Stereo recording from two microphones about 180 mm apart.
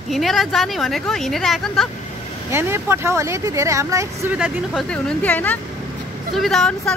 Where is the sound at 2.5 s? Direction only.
15° right (ahead or behind).